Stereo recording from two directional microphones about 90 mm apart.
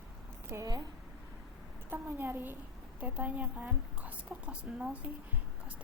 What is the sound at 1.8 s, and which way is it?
A woman's voice, 20° right (ahead or behind).